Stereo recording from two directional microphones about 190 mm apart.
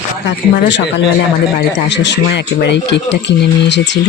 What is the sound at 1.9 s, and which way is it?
Speech, 70° left (ahead or behind).